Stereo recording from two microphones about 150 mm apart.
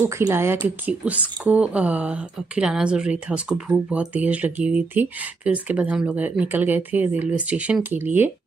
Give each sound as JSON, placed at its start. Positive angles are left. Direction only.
{"t": 0.0, "sound": "speech", "side_deg": -20}